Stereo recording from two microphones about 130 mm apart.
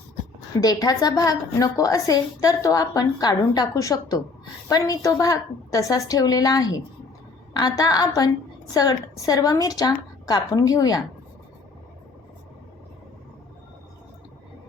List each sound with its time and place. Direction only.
0.6 s a woman's voice: 30° left (ahead or behind)